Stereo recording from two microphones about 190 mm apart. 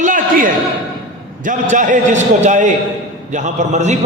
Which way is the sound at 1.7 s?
40° right (ahead or behind).